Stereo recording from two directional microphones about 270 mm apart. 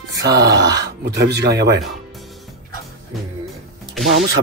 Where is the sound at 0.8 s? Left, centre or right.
Right.